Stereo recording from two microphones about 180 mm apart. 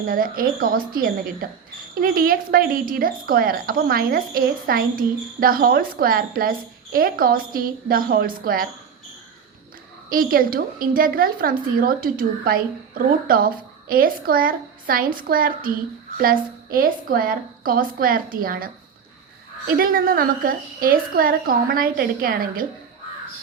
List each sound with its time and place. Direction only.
0.0 s speech: 50° right (ahead or behind)
10.1 s speech: 55° right (ahead or behind)